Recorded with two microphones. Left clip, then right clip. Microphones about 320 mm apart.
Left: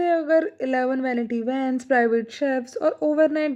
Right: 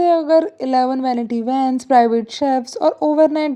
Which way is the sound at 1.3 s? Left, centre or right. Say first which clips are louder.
Right 7 dB; centre.